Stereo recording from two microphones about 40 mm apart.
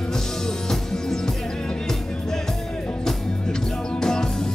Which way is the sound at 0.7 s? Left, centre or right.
Centre.